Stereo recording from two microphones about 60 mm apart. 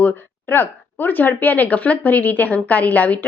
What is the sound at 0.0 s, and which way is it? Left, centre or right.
Speech, left.